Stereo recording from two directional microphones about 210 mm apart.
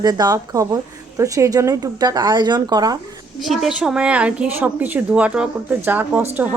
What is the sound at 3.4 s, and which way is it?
A woman's voice, centre (ahead or behind).